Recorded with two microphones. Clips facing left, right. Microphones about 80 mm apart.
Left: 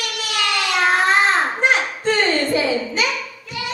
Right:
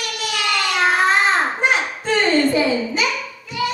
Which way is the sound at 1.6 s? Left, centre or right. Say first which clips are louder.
Left 1 dB; centre.